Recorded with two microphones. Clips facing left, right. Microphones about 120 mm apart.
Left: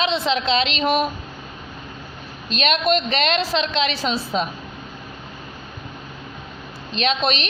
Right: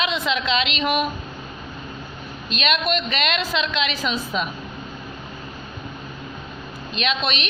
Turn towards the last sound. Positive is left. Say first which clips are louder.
# left 3 dB
turn(degrees=35)  # may be behind; listen again after turning